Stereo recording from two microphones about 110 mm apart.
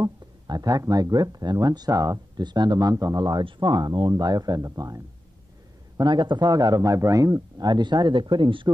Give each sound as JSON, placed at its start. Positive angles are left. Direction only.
{"t": 0.0, "sound": "speech", "side_deg": -35}